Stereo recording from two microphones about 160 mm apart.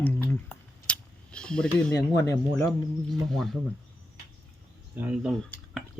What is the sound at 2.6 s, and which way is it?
Speech, centre (ahead or behind).